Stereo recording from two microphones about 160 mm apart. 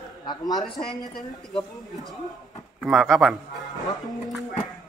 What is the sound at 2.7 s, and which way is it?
Speech, centre (ahead or behind).